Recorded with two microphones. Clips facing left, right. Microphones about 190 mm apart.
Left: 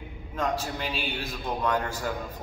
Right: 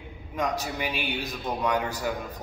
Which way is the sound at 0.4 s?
15° right (ahead or behind).